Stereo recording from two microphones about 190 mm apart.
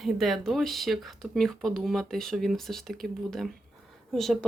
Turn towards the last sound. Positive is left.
turn(degrees=0)  # may be behind; listen again after turning